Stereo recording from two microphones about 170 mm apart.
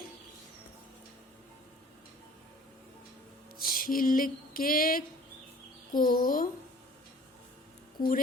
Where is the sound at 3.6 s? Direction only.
55° left (ahead or behind).